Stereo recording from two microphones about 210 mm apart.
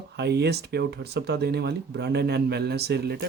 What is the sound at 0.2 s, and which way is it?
Speech, 55° right (ahead or behind).